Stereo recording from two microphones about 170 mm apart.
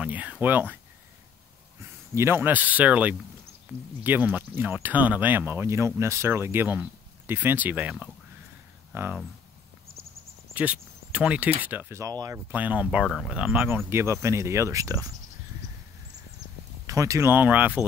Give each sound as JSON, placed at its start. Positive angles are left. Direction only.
{"t": 0.0, "sound": "speech", "side_deg": -10}
{"t": 2.1, "sound": "speech", "side_deg": -15}
{"t": 10.5, "sound": "speech", "side_deg": -10}
{"t": 16.8, "sound": "speech", "side_deg": -20}